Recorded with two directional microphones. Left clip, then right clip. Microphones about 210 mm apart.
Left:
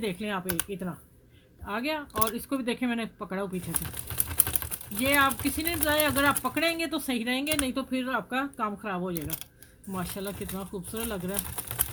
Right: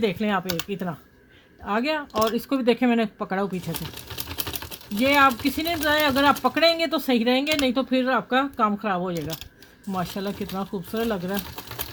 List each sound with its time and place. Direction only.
0.0 s speech: 45° right (ahead or behind)
4.9 s speech: 40° right (ahead or behind)